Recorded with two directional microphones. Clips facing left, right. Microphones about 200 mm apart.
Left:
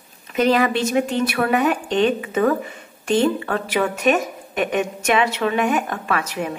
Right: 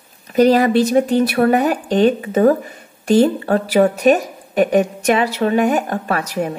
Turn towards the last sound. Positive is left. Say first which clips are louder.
# right 3 dB
turn(degrees=-40)  # may be behind; listen again after turning